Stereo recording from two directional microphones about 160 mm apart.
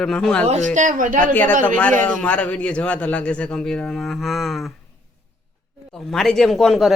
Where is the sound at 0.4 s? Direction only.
45° right (ahead or behind).